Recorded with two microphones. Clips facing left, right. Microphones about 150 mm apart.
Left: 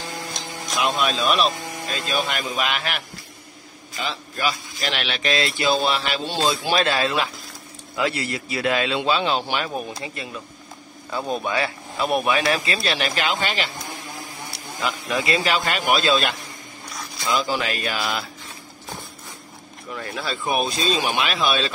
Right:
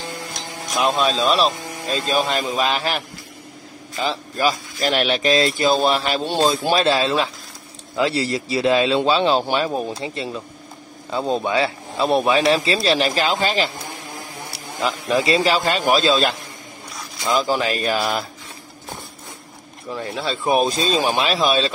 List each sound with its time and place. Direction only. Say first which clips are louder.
0.7 s speech: right 4 dB; 35° right (ahead or behind)
4.0 s speech: right 5 dB; 35° right (ahead or behind)
6.7 s speech: right 3 dB; 30° right (ahead or behind)
14.8 s speech: right 5 dB; 30° right (ahead or behind)
19.9 s speech: right 4 dB; 25° right (ahead or behind)